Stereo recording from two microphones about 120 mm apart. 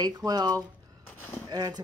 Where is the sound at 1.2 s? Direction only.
25° left (ahead or behind).